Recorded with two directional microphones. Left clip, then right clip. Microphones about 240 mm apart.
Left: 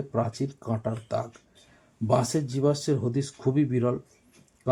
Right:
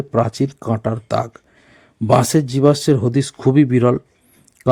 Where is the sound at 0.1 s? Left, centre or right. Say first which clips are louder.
Right 12 dB; right.